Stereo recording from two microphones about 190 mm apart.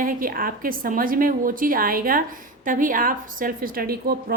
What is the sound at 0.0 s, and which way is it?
A woman's voice, 45° right (ahead or behind).